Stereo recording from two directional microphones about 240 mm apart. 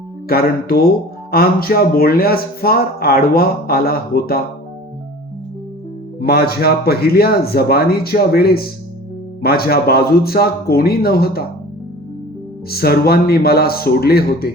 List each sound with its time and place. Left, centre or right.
0.3 s speech: left
6.1 s speech: left
12.7 s speech: left